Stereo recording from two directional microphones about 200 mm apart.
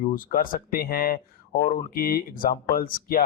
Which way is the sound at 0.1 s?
45° left (ahead or behind).